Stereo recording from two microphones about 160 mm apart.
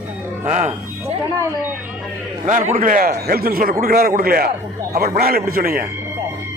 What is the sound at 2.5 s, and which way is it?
A man's voice, 55° right (ahead or behind).